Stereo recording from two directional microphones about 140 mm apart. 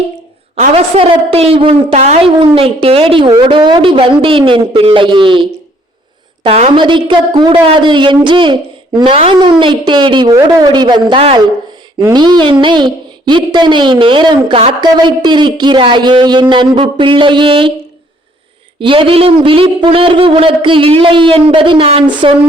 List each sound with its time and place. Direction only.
0.5 s speech: 50° right (ahead or behind)
18.8 s speech: 40° right (ahead or behind)